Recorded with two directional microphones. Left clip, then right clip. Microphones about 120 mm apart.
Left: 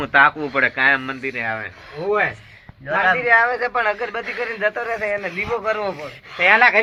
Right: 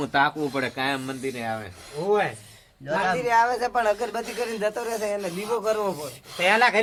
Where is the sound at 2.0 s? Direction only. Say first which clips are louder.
Left 2 dB; 90° left.